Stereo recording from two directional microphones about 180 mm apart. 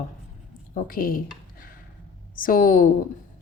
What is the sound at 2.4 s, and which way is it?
Speech, 50° left (ahead or behind).